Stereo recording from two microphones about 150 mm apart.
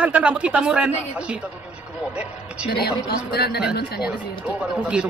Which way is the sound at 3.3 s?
90° left.